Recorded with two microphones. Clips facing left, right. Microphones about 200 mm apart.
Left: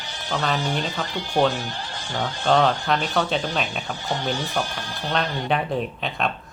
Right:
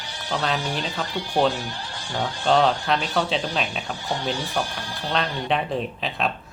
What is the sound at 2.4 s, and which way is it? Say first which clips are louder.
Speech: even; centre (ahead or behind).